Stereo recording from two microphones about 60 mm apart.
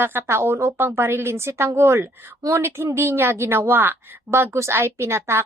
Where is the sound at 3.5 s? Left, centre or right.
Right.